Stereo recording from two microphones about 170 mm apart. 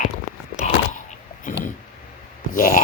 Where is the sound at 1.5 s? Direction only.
50° left (ahead or behind).